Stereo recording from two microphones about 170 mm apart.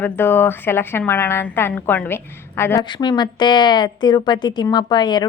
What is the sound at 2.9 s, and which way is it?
A woman's voice, 25° left (ahead or behind).